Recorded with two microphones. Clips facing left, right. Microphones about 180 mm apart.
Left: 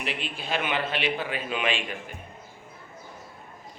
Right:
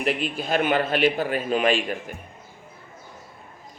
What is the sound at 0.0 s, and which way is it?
Speech, 45° right (ahead or behind).